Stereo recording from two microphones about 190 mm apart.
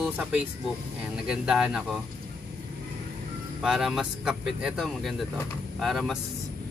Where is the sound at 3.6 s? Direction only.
Centre (ahead or behind).